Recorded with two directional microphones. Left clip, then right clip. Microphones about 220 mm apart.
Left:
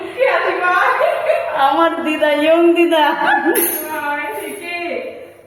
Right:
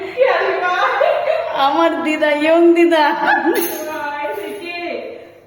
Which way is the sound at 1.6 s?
10° right (ahead or behind).